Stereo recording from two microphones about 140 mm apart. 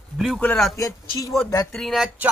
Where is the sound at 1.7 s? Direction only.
Centre (ahead or behind).